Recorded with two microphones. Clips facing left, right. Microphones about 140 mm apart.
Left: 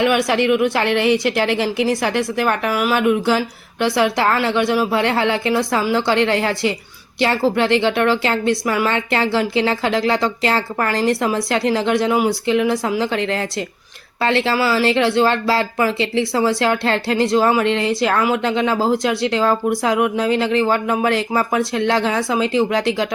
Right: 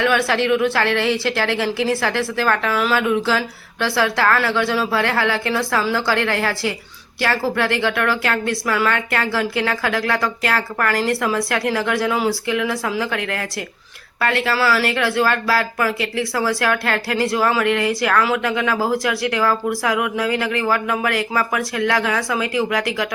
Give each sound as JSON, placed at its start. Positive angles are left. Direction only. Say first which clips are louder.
{"t": 0.0, "sound": "a woman's voice", "louder": "left 2 dB", "side_deg": 15}